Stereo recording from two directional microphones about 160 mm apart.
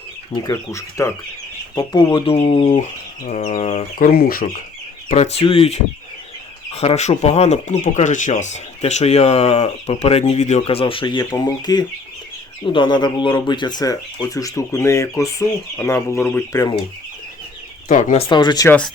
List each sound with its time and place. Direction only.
0.3 s speech: 20° left (ahead or behind); by 2.8 s 40° left (ahead or behind)
3.2 s chicken: 50° left (ahead or behind)
3.9 s speech: 65° left (ahead or behind)
5.0 s speech: 45° left (ahead or behind); by 16.7 s 20° left (ahead or behind)
17.8 s chicken: 55° left (ahead or behind)
18.2 s speech: 30° left (ahead or behind)